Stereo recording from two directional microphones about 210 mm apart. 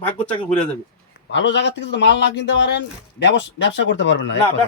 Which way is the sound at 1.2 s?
60° left (ahead or behind).